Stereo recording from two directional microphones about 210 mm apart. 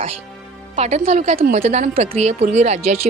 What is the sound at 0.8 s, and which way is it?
A woman's voice, 30° right (ahead or behind).